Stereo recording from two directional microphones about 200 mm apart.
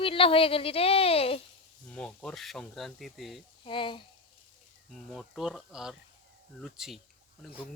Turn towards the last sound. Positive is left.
turn(degrees=0)  # may be behind; listen again after turning